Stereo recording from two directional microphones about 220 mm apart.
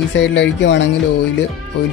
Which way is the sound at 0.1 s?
55° left (ahead or behind).